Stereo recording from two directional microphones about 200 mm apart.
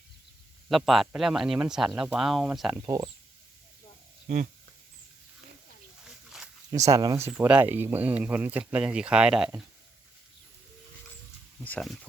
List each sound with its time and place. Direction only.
0.7 s speech: centre (ahead or behind)
2.8 s speech: 20° right (ahead or behind)
6.3 s a sound: centre (ahead or behind)
6.8 s speech: 15° right (ahead or behind)
11.6 s speech: 5° left (ahead or behind)